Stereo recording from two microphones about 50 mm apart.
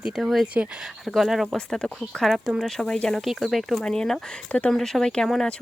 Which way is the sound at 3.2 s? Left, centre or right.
Centre.